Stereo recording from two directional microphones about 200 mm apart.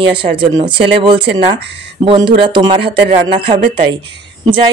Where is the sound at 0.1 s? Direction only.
25° right (ahead or behind).